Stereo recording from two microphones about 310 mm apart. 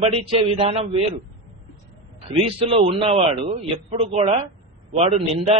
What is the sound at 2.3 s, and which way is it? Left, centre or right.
Speech, centre.